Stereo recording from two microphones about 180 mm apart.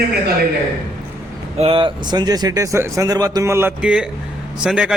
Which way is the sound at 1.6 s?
30° right (ahead or behind).